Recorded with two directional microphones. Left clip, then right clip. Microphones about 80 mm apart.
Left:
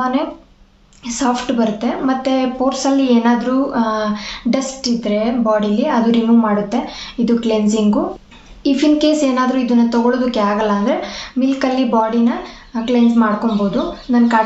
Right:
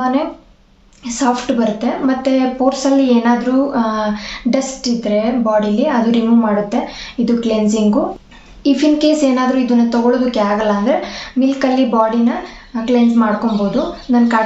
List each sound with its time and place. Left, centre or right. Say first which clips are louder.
1.0 s speech: right 2 dB; left